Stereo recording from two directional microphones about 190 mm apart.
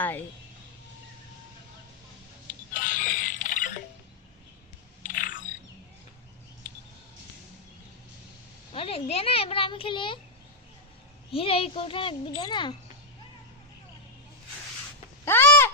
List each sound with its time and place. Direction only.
0.0 s speech: 10° left (ahead or behind)
2.7 s music: 45° left (ahead or behind)
5.0 s bird: 45° left (ahead or behind)
8.7 s speech: 30° left (ahead or behind)
11.3 s a child's voice: 30° left (ahead or behind)
15.2 s a sound: 10° left (ahead or behind)